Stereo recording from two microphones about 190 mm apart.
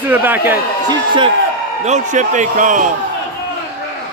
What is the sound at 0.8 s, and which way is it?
Speech, 25° right (ahead or behind).